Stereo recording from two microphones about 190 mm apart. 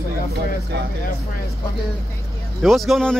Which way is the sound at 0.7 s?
60° right (ahead or behind).